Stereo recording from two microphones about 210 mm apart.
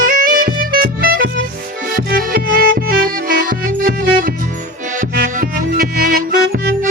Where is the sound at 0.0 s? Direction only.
40° right (ahead or behind).